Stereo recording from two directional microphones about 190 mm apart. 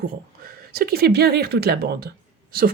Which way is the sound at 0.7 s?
55° right (ahead or behind).